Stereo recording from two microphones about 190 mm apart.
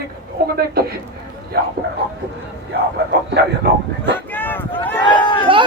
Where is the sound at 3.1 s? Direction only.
60° right (ahead or behind).